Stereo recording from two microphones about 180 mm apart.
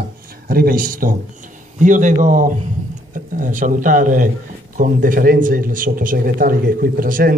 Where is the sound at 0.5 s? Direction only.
55° right (ahead or behind).